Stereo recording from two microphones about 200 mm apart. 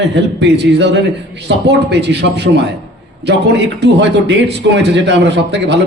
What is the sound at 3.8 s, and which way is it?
A man's voice, 60° right (ahead or behind).